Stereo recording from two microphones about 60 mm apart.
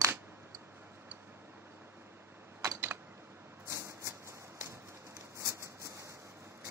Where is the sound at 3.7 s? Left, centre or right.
Right.